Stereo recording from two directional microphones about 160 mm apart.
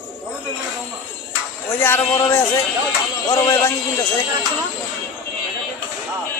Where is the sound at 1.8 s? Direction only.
15° left (ahead or behind).